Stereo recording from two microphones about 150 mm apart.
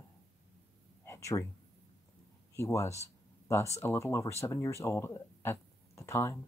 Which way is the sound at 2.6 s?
20° left (ahead or behind).